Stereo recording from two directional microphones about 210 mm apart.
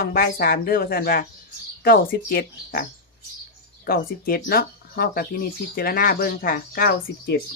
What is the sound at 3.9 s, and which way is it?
Speech, 45° left (ahead or behind).